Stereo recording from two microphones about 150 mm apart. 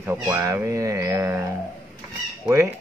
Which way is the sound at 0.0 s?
15° right (ahead or behind).